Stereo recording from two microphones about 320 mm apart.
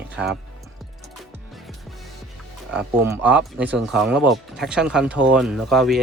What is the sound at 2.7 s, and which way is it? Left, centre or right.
Speech, centre.